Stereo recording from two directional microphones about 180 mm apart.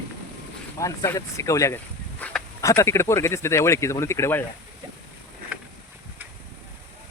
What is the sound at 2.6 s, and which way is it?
Speech, 15° left (ahead or behind).